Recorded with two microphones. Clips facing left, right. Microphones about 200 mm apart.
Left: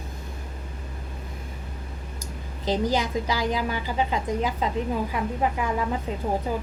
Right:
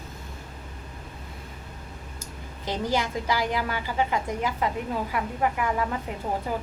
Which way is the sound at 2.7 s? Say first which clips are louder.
Left 3 dB; 20° left (ahead or behind).